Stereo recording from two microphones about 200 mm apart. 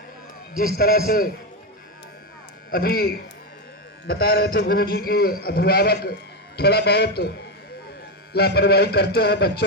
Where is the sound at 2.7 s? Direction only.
50° left (ahead or behind).